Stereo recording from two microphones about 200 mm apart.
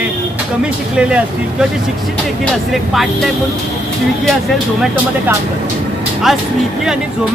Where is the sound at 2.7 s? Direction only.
Centre (ahead or behind).